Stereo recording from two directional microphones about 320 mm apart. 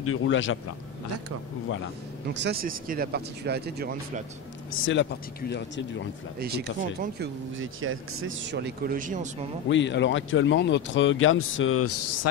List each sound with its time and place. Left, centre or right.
0.0 s speech: left
2.3 s speech: right
4.7 s speech: left
6.4 s speech: right
9.7 s speech: left